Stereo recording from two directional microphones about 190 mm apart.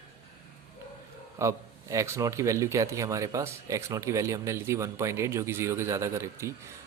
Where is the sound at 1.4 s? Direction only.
15° right (ahead or behind).